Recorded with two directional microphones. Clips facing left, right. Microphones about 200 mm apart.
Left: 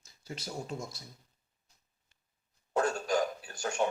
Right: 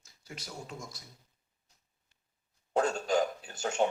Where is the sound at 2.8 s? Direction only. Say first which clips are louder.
Right 1 dB; 25° right (ahead or behind).